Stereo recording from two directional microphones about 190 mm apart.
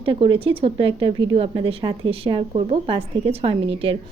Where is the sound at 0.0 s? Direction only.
30° right (ahead or behind).